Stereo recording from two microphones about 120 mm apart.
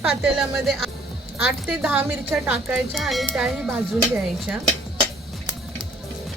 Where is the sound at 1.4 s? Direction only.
15° right (ahead or behind).